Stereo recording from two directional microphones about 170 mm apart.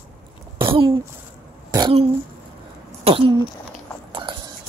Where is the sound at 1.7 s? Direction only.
25° right (ahead or behind).